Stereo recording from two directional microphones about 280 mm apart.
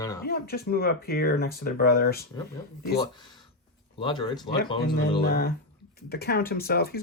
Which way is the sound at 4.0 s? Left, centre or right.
Centre.